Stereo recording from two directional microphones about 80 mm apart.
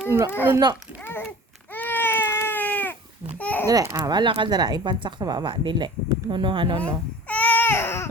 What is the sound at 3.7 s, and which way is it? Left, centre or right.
Speech, right.